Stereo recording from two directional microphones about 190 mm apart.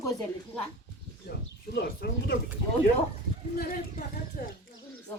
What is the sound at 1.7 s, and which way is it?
Speech, 60° left (ahead or behind).